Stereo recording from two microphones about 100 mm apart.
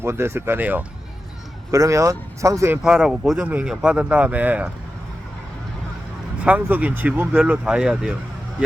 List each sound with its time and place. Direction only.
0.0 s speech: 25° right (ahead or behind)
1.7 s speech: 35° right (ahead or behind)
2.8 s speech: 5° right (ahead or behind)
6.4 s speech: 15° right (ahead or behind)